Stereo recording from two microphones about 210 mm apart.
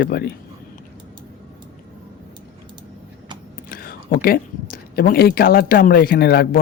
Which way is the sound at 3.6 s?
45° left (ahead or behind).